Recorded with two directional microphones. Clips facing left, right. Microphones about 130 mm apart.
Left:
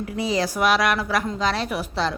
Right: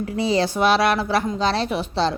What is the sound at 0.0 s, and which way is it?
Speech, 30° right (ahead or behind).